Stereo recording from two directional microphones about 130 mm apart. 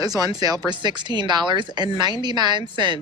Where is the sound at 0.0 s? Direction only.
30° right (ahead or behind).